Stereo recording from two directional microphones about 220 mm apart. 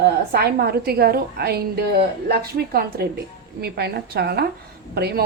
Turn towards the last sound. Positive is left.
turn(degrees=-45)  # may be behind; listen again after turning